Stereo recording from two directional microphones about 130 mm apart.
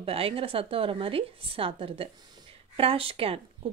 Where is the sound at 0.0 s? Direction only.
45° right (ahead or behind).